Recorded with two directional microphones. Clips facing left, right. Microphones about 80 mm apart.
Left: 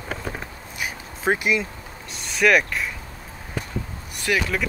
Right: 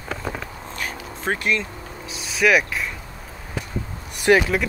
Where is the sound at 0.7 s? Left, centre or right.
Centre.